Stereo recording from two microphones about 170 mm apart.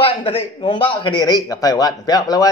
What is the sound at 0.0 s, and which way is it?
A man's voice, 35° left (ahead or behind).